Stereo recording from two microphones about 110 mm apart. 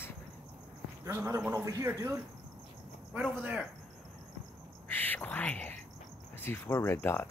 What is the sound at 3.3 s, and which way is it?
Speech, 15° right (ahead or behind).